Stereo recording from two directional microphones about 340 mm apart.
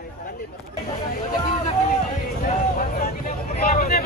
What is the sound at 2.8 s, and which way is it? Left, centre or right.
Vehicle, left.